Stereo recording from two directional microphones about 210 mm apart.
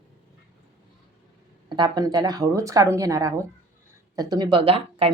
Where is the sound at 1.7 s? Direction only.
20° right (ahead or behind).